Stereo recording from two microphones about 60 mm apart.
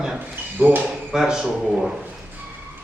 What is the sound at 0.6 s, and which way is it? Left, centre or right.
Speech, right.